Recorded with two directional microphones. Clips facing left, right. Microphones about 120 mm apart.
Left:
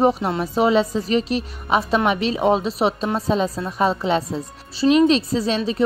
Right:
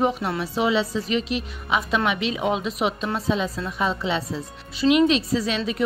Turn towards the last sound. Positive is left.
turn(degrees=35)  # may be behind; listen again after turning